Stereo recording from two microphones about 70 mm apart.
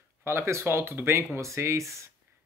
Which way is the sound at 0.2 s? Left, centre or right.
Right.